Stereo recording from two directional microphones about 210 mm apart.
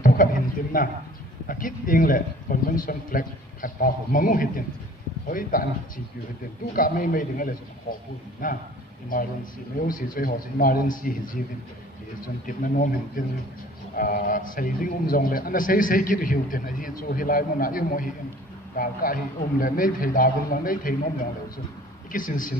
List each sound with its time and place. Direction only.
0.0 s a sound: 40° left (ahead or behind)
0.7 s a man's voice: 40° left (ahead or behind)
6.7 s a man's voice: 40° left (ahead or behind)
12.5 s a man's voice: 40° left (ahead or behind)
22.1 s a man's voice: 40° left (ahead or behind)